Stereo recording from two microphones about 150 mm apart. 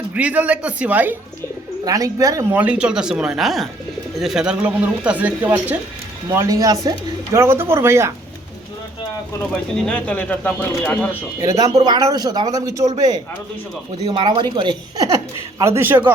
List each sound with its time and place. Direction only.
0.1 s speech: 10° right (ahead or behind)
1.8 s a man's voice: 25° right (ahead or behind)
2.5 s a man's voice: 10° right (ahead or behind)
9.4 s speech: 5° left (ahead or behind)
11.3 s a man's voice: 20° right (ahead or behind)